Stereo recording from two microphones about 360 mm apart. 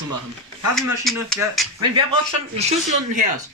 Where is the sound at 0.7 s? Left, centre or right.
Centre.